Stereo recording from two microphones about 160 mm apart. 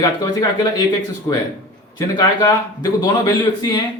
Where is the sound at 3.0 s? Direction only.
25° left (ahead or behind).